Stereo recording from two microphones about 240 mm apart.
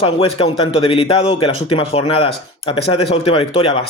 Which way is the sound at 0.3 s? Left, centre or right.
Left.